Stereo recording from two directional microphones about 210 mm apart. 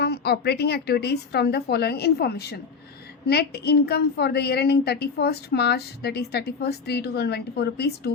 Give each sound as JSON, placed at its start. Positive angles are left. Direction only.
{"t": 0.0, "sound": "a woman's voice", "side_deg": 50}